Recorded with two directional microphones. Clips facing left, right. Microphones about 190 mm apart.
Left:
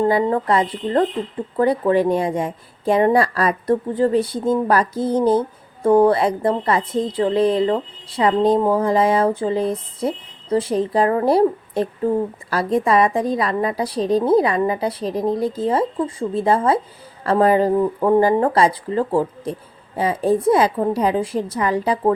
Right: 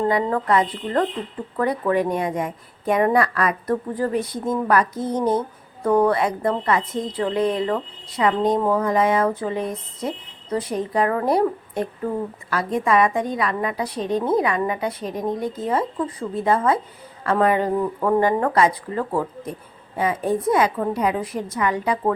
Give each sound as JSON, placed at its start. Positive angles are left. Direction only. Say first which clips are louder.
{"t": 0.1, "sound": "a woman's voice", "louder": "left 2 dB", "side_deg": 30}